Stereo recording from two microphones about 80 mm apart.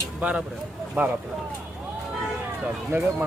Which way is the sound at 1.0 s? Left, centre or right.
Right.